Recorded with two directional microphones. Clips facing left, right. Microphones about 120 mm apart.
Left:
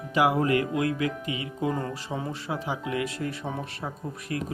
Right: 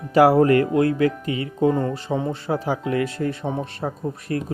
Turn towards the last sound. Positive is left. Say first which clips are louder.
# right 6 dB
turn(degrees=-35)  # may be behind; listen again after turning